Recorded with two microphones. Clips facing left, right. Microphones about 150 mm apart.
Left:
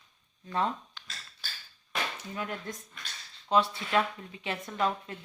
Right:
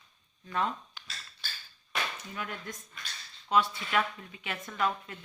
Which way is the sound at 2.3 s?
35° left (ahead or behind).